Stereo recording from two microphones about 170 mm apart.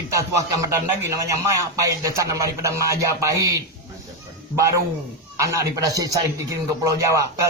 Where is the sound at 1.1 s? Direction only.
20° right (ahead or behind).